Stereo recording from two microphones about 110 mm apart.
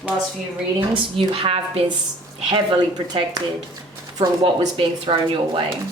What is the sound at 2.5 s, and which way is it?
Speech, 50° right (ahead or behind).